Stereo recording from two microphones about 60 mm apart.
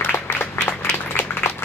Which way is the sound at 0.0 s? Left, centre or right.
Left.